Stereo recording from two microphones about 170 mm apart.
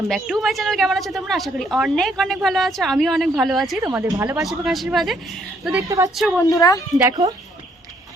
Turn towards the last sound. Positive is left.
turn(degrees=-20)  # may be behind; listen again after turning